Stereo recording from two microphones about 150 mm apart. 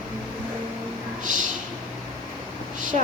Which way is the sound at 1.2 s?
60° right (ahead or behind).